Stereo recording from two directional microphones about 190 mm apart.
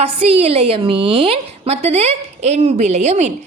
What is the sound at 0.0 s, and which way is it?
A woman's voice, 30° right (ahead or behind).